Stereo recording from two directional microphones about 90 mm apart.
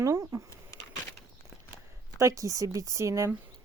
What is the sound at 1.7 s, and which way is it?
Speech, 35° right (ahead or behind).